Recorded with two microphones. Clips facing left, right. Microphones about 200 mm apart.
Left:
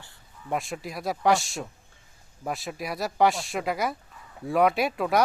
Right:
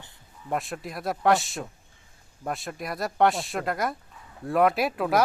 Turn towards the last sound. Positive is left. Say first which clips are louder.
# even
turn(degrees=0)  # may be behind; listen again after turning